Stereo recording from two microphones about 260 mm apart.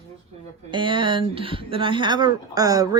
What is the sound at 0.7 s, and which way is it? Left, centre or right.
A woman's voice, centre.